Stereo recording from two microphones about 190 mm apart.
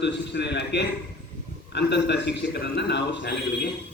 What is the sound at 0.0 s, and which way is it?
A man's voice, 65° left (ahead or behind).